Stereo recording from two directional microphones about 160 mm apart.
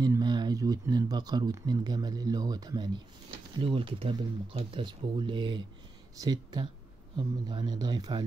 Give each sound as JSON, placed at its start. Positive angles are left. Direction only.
{"t": 0.0, "sound": "a man's voice", "side_deg": -25}